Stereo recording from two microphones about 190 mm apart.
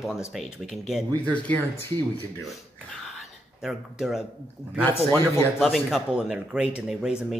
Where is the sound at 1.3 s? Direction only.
10° left (ahead or behind).